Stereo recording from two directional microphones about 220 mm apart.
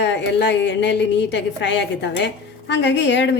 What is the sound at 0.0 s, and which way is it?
A woman's voice, 50° left (ahead or behind).